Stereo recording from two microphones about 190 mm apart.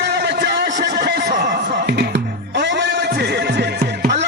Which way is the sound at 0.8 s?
60° right (ahead or behind).